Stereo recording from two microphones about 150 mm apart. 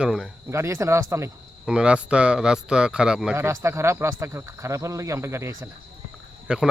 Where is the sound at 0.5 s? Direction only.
20° right (ahead or behind).